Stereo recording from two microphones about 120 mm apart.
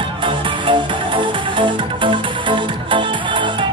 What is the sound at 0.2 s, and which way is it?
Music, 45° right (ahead or behind).